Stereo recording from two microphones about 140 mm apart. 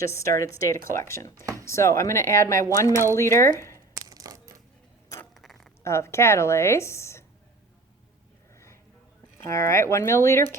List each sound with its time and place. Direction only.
0.0 s a woman's voice: 20° left (ahead or behind)
4.1 s crushing: 25° right (ahead or behind)
5.3 s a sound: centre (ahead or behind)
5.8 s a woman's voice: 20° left (ahead or behind)
8.5 s a sound: 20° left (ahead or behind)
9.4 s a woman's voice: 20° left (ahead or behind)